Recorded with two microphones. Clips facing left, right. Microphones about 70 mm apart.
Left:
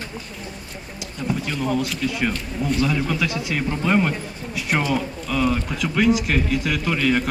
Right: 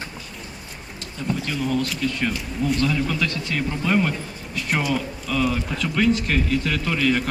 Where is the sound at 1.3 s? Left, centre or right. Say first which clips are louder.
Left 1 dB; centre.